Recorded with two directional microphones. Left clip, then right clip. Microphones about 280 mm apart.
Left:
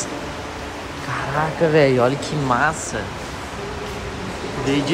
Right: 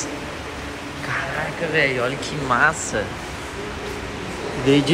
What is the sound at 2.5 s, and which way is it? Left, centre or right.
Speech, centre.